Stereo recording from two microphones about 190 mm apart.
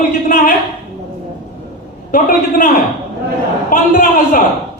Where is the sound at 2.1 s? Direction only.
45° left (ahead or behind).